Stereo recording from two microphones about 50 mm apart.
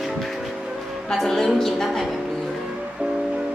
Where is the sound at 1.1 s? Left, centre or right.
Centre.